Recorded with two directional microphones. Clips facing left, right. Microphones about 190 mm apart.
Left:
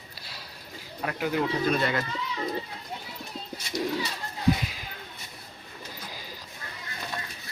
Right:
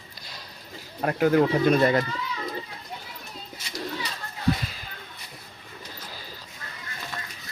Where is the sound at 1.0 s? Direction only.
45° right (ahead or behind).